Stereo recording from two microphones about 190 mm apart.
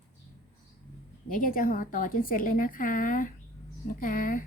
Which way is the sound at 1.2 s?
45° left (ahead or behind).